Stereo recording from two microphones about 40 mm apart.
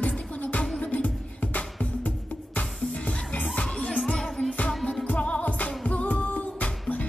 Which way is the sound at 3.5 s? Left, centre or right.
Left.